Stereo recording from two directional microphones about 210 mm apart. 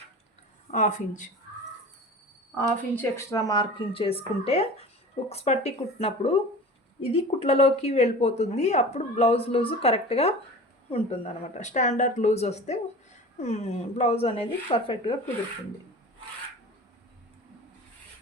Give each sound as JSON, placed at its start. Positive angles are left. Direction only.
{"t": 0.7, "sound": "speech", "side_deg": 35}
{"t": 2.6, "sound": "speech", "side_deg": 10}